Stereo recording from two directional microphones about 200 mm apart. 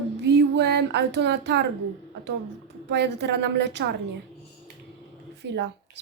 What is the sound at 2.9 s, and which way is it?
Speech, 60° right (ahead or behind).